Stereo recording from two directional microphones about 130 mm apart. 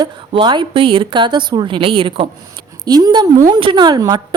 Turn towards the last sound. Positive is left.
turn(degrees=-30)  # may be behind; listen again after turning